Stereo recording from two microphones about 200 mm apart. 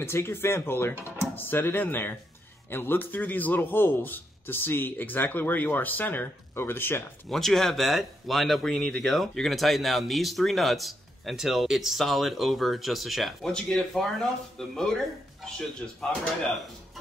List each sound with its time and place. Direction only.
0.0 s a man's voice: 10° left (ahead or behind)